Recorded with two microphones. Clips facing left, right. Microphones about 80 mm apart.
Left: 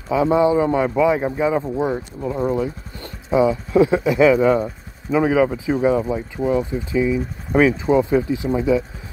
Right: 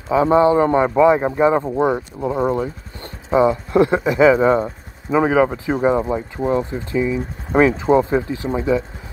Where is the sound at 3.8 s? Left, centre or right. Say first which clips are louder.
Even; right.